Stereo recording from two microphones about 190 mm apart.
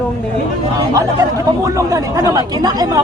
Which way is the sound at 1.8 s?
15° right (ahead or behind).